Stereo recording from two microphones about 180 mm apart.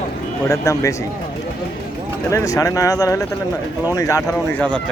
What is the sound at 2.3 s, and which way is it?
Speech, 20° left (ahead or behind).